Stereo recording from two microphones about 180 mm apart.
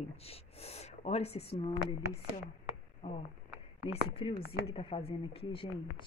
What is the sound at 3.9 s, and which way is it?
Speech, 30° left (ahead or behind).